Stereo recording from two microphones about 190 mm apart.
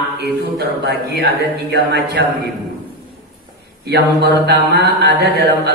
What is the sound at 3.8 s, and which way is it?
A man's voice, 60° right (ahead or behind).